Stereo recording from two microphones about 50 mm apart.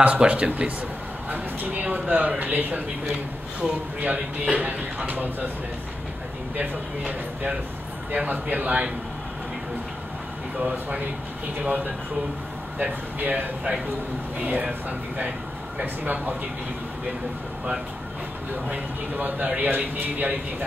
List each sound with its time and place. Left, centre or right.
0.0 s speech: right
1.3 s a sound: right
2.1 s speech: right
3.6 s speech: right
6.5 s speech: right
10.6 s speech: centre; by 16.3 s right
18.7 s speech: right